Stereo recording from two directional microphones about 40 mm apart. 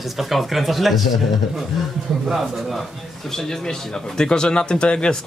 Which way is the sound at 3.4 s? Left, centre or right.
Centre.